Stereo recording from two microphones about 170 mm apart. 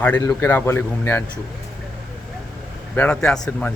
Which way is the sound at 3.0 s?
5° left (ahead or behind).